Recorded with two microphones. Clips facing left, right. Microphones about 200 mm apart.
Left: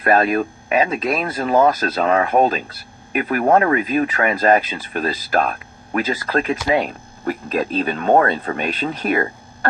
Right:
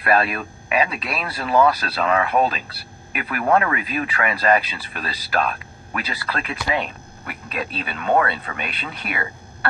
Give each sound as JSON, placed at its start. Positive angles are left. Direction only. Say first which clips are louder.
{"t": 0.0, "sound": "speech", "louder": "left 4 dB", "side_deg": 45}